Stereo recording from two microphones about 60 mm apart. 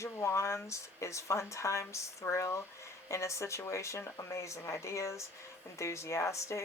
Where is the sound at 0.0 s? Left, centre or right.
Left.